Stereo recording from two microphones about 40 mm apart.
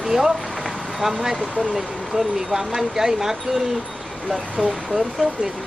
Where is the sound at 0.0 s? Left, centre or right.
Centre.